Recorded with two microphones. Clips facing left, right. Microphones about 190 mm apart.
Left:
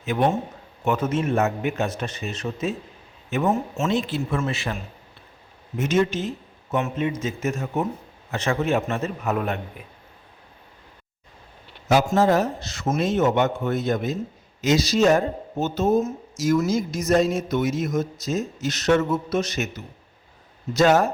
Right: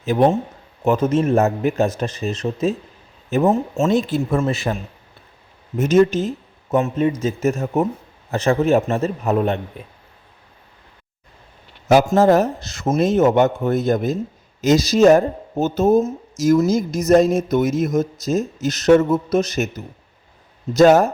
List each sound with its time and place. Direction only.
0.0 s speech: 35° right (ahead or behind)
11.9 s a man's voice: 45° right (ahead or behind)
20.7 s a man's voice: 45° right (ahead or behind)